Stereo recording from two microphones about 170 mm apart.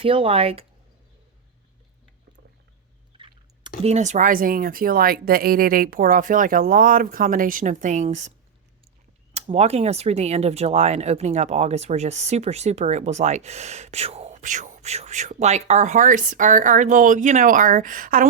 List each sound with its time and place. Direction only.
0.0 s speech: 35° right (ahead or behind)
3.2 s a sound: 30° right (ahead or behind)
3.8 s speech: 45° right (ahead or behind)
9.3 s speech: 40° right (ahead or behind); by 18.3 s 55° right (ahead or behind)